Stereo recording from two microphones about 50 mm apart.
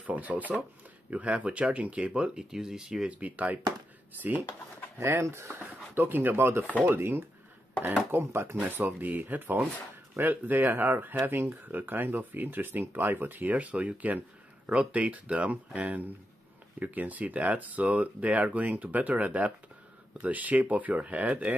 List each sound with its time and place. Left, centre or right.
0.0 s speech: right
2.3 s speech: centre
3.1 s speech: right
4.9 s speech: right
5.5 s speech: right